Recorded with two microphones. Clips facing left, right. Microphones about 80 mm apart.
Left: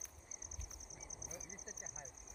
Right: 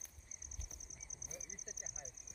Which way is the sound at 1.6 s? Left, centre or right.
Left.